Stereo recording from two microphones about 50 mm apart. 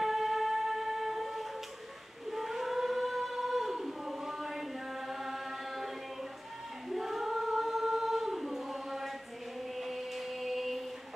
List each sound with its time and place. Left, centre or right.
0.0 s music: centre
2.3 s singing: centre
6.9 s choir: centre
9.8 s chant: centre